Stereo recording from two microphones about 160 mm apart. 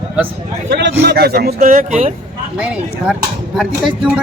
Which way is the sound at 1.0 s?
80° right.